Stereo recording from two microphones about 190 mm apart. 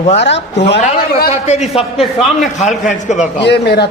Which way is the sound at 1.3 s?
35° left (ahead or behind).